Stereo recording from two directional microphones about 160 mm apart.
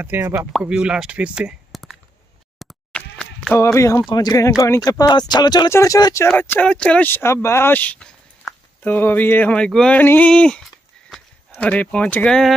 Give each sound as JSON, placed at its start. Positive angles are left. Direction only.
{"t": 0.0, "sound": "speech", "side_deg": -15}
{"t": 2.6, "sound": "a sound", "side_deg": 5}
{"t": 3.6, "sound": "speech", "side_deg": 20}
{"t": 6.2, "sound": "speech", "side_deg": 10}